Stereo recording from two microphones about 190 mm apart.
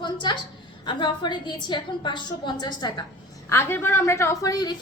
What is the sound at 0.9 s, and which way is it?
A woman's voice, 25° left (ahead or behind).